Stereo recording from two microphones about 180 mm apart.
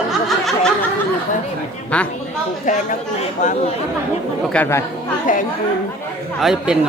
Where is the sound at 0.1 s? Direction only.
Centre (ahead or behind).